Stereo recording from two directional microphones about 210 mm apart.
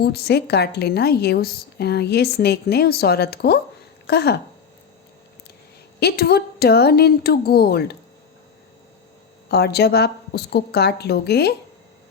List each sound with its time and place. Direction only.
0.0 s a woman's voice: 50° left (ahead or behind)
6.0 s a woman's voice: 50° left (ahead or behind)
9.5 s a woman's voice: 50° left (ahead or behind)